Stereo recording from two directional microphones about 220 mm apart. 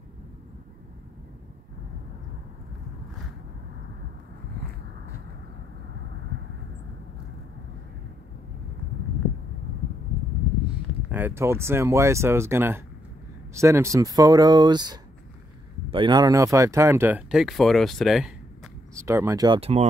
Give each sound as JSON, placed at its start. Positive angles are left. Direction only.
{"t": 11.1, "sound": "speech", "side_deg": -10}
{"t": 18.9, "sound": "speech", "side_deg": -15}